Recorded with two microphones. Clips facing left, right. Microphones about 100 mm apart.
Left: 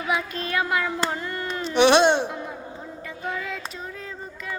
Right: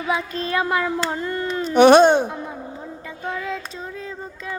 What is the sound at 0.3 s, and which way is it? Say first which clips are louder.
A child's voice: right 3 dB; 35° right (ahead or behind).